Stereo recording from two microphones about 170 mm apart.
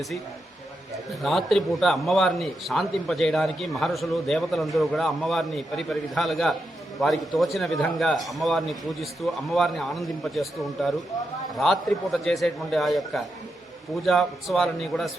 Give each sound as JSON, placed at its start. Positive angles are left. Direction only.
{"t": 1.2, "sound": "a man's voice", "side_deg": 0}